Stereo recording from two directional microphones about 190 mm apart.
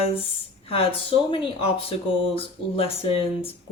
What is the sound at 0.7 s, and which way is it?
Speech, 30° left (ahead or behind).